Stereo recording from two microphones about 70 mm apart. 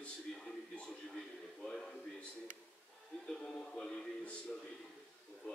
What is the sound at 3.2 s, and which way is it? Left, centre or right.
Music, centre.